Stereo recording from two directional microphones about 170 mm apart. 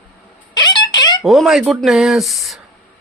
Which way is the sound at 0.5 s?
25° left (ahead or behind).